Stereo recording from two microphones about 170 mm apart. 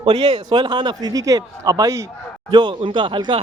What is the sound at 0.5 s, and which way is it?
Speech, 25° right (ahead or behind).